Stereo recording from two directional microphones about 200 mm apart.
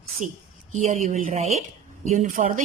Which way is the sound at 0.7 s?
35° right (ahead or behind).